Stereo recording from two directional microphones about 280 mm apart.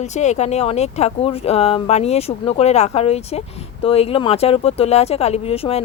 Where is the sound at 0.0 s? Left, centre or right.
Left.